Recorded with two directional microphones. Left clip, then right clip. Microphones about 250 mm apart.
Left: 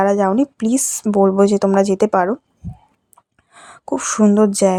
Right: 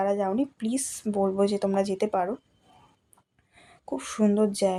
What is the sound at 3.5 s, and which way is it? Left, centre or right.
Speech, left.